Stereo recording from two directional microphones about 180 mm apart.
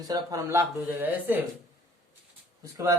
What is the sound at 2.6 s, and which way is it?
Speech, 20° right (ahead or behind).